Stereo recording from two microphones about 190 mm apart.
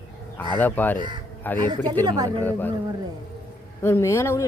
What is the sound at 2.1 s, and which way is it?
Speech, 20° right (ahead or behind).